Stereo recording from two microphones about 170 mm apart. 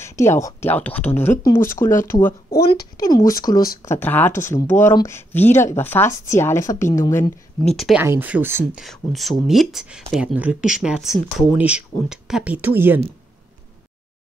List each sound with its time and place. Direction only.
0.0 s speech: 15° left (ahead or behind)
2.5 s speech: 65° left (ahead or behind)
3.0 s speech: 20° left (ahead or behind)
7.7 s speech: centre (ahead or behind)
8.0 s speech: 10° right (ahead or behind)
8.8 s speech: centre (ahead or behind)